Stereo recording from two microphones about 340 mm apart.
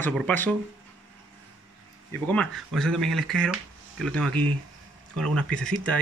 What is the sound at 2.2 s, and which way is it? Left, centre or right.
Speech, centre.